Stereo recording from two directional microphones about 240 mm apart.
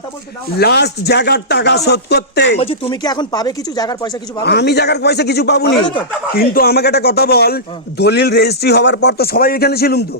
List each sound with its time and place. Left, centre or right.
0.6 s speech: left
2.6 s speech: left
4.4 s speech: left
5.7 s speech: left
6.3 s a man's voice: left